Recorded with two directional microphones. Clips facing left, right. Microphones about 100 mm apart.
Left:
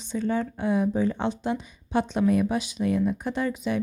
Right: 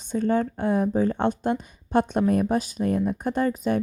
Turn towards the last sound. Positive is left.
turn(degrees=-45)  # may be behind; listen again after turning